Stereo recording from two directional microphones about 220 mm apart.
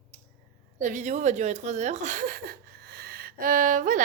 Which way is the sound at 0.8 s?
35° right (ahead or behind).